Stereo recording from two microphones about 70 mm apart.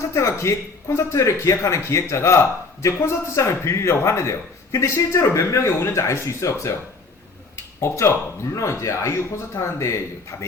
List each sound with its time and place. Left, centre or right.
0.1 s speech: left
7.5 s a sound: left
8.5 s speech: left